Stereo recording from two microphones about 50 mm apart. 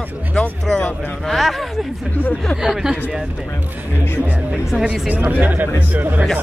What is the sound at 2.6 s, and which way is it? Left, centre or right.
Speech, centre.